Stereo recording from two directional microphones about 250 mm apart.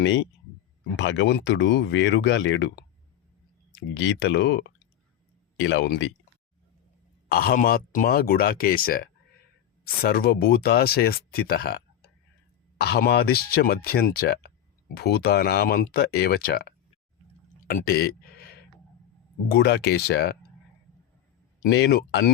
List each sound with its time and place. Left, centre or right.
0.9 s speech: left
3.9 s speech: left
7.3 s speech: left
17.7 s a sound: left
19.5 s speech: left
21.6 s speech: left